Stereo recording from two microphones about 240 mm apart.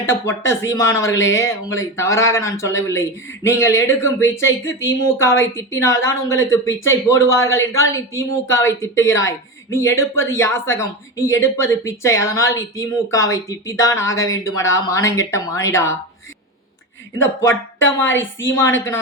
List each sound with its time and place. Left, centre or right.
0.0 s a woman's voice: centre
17.5 s speech: left
18.2 s a woman's voice: centre